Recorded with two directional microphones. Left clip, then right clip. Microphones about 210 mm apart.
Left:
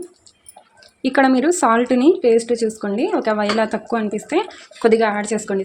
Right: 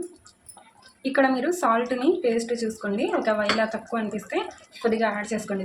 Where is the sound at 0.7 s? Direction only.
50° left (ahead or behind).